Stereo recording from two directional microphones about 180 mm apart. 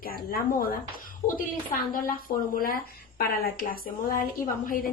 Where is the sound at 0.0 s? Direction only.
55° left (ahead or behind).